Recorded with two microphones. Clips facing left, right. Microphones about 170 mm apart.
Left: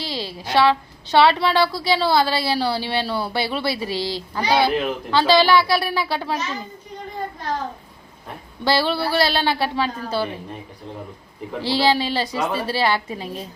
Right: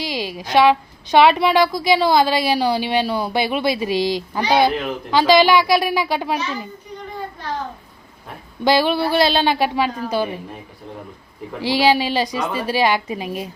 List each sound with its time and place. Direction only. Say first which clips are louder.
0.0 s a sound: right 4 dB; 15° right (ahead or behind)
0.5 s a woman's voice: right 3 dB; 15° right (ahead or behind)
8.6 s a woman's voice: right 4 dB; 15° right (ahead or behind)
11.6 s a woman's voice: right 3 dB; 15° right (ahead or behind)